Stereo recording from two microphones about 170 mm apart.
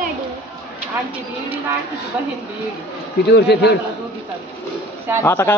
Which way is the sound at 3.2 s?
80° left.